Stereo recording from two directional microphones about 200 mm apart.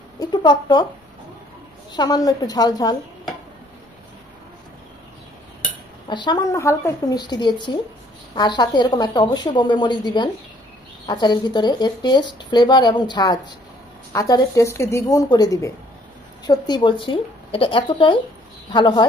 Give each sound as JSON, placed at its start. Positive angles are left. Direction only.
{"t": 0.2, "sound": "speech", "side_deg": 20}
{"t": 1.9, "sound": "speech", "side_deg": 20}
{"t": 6.0, "sound": "speech", "side_deg": 20}